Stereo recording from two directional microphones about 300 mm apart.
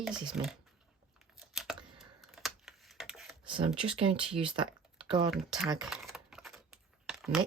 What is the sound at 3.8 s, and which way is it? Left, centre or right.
Speech, centre.